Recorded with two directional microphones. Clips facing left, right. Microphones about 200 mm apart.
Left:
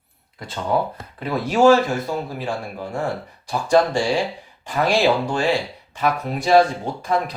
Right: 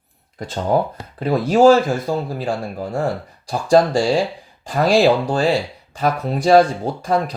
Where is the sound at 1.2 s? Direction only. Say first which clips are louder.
Right 3 dB; 35° right (ahead or behind).